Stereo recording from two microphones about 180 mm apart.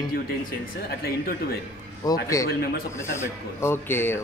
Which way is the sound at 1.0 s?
60° left (ahead or behind).